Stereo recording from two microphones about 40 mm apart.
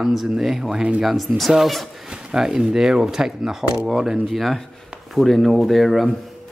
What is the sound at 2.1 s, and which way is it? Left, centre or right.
Speech, centre.